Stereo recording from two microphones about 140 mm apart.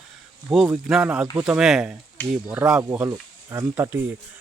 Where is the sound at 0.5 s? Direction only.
5° right (ahead or behind).